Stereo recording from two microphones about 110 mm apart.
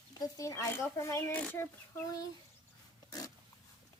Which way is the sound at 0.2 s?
30° left (ahead or behind).